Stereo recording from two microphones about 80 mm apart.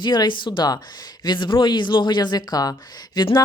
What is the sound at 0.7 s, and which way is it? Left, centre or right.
Speech, left.